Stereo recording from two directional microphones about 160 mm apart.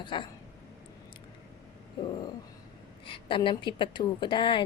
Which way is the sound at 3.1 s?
30° left (ahead or behind).